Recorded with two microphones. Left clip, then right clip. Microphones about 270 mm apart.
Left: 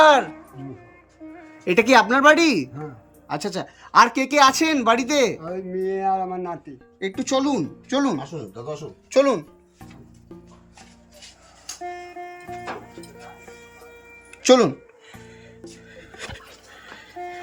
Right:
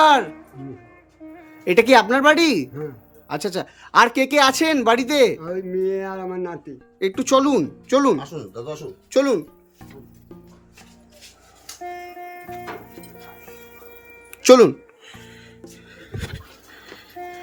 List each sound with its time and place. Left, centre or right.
0.0 s music: centre
1.2 s speech: centre
9.0 s speech: centre
11.6 s music: centre
17.0 s train: centre